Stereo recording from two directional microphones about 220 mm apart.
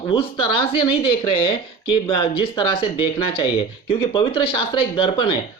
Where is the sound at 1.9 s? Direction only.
25° left (ahead or behind).